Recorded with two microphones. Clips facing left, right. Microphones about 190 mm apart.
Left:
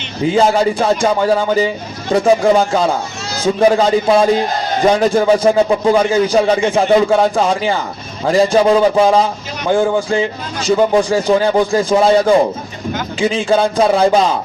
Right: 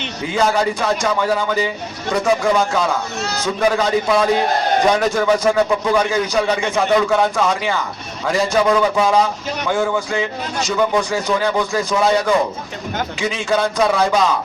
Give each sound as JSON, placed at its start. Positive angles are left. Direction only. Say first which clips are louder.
{"t": 0.3, "sound": "speech", "louder": "left 4 dB", "side_deg": 30}